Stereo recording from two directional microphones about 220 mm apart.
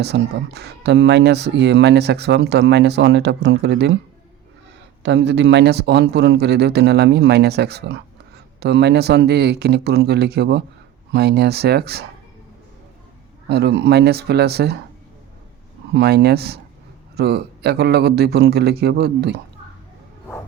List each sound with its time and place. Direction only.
0.0 s speech: 50° right (ahead or behind)
5.0 s speech: 55° right (ahead or behind)
13.5 s speech: 50° right (ahead or behind)
15.9 s speech: 50° right (ahead or behind)